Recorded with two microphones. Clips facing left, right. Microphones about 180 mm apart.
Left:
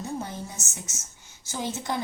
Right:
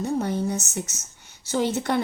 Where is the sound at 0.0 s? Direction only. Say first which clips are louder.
Right 9 dB; 70° right (ahead or behind).